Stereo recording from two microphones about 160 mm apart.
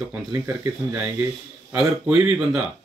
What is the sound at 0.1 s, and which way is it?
Speech, 10° right (ahead or behind).